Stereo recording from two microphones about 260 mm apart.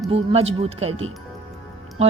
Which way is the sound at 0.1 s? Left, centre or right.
Right.